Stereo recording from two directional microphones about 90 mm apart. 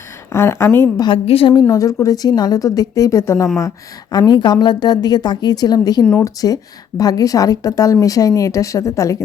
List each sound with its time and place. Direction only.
0.3 s speech: 30° left (ahead or behind)
1.1 s a woman's voice: 85° left
1.6 s a woman's voice: 40° left (ahead or behind)
4.1 s a woman's voice: 50° left (ahead or behind)